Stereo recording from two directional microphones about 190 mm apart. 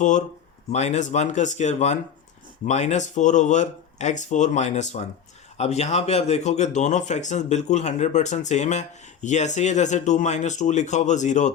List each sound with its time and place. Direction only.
0.7 s speech: 35° left (ahead or behind)